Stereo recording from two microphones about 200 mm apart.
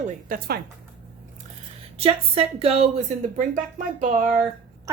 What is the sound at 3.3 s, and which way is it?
Speech, 40° right (ahead or behind).